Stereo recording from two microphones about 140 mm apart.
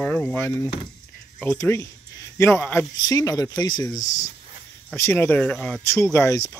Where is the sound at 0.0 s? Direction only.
10° left (ahead or behind).